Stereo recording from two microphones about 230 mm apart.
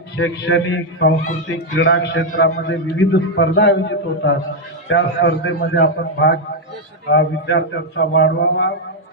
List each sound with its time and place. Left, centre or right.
0.2 s a man's voice: left